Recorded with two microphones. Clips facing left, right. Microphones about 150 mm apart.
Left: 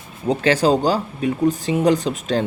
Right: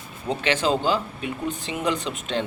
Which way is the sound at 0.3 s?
40° left (ahead or behind).